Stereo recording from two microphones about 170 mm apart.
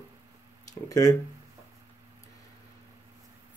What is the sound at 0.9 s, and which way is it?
Speech, 20° left (ahead or behind).